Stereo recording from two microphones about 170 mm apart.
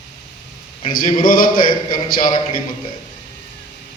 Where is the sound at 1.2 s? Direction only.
55° left (ahead or behind).